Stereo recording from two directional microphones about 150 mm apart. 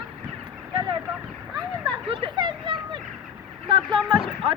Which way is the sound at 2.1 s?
35° right (ahead or behind).